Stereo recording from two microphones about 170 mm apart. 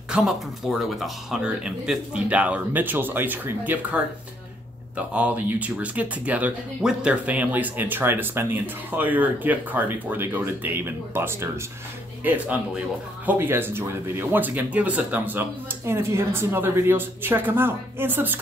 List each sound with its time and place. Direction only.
0.1 s speech: centre (ahead or behind)